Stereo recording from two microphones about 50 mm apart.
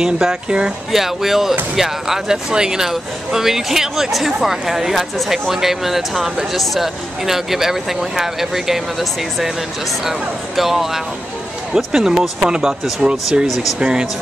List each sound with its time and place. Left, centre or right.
0.0 s speech: centre
0.9 s speech: centre